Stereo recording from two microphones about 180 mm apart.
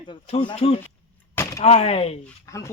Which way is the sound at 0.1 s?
30° left (ahead or behind).